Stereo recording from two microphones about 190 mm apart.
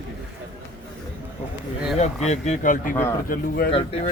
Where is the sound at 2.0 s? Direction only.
35° left (ahead or behind).